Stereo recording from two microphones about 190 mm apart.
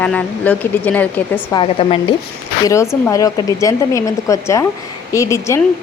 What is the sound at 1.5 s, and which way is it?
Speech, 25° left (ahead or behind).